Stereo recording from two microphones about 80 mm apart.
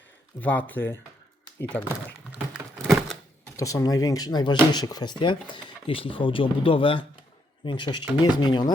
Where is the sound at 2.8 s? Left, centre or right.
Centre.